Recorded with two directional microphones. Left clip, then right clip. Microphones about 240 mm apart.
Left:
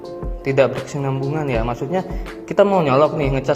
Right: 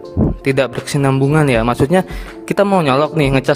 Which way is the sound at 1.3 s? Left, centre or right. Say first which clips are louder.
Right 7 dB; right.